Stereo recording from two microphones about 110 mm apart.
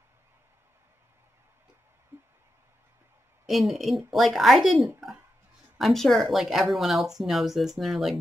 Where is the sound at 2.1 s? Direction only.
15° right (ahead or behind).